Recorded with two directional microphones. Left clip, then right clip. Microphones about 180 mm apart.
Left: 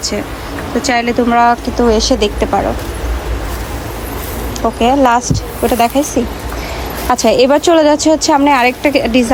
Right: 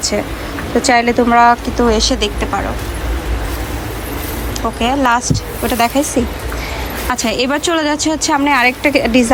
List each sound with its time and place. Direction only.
0.8 s speech: 10° left (ahead or behind); by 2.6 s 25° left (ahead or behind)
4.6 s a woman's voice: 25° left (ahead or behind)
7.1 s a woman's voice: 25° left (ahead or behind)